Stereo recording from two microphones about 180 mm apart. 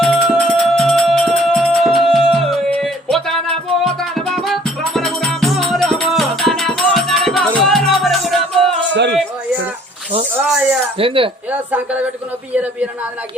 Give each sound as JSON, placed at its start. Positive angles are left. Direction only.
{"t": 0.0, "sound": "music", "side_deg": 0}
{"t": 8.9, "sound": "a sound", "side_deg": -75}
{"t": 10.9, "sound": "speech", "side_deg": -30}
{"t": 11.7, "sound": "a man's voice", "side_deg": -10}